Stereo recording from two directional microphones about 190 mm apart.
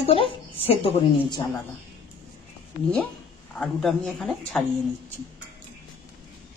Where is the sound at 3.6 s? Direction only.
Centre (ahead or behind).